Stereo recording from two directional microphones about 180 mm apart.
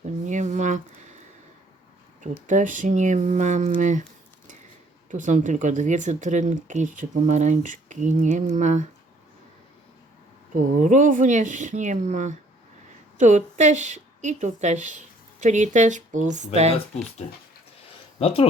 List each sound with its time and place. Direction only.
0.0 s a sound: 45° right (ahead or behind)
2.5 s speech: 45° right (ahead or behind)
5.1 s speech: 45° right (ahead or behind)
10.5 s a woman's voice: 45° right (ahead or behind)
18.2 s speech: 30° left (ahead or behind)